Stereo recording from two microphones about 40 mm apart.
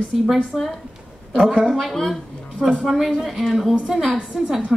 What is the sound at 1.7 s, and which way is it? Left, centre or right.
A woman's voice, centre.